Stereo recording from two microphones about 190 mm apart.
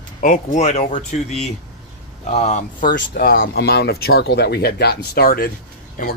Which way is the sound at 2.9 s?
55° left (ahead or behind).